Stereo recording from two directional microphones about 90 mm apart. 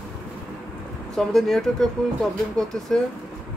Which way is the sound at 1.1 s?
5° left (ahead or behind).